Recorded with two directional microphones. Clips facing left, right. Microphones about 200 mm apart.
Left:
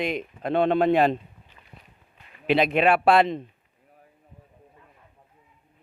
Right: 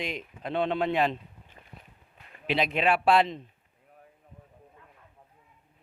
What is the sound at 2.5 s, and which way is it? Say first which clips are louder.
Speech: left 6 dB; 60° left (ahead or behind).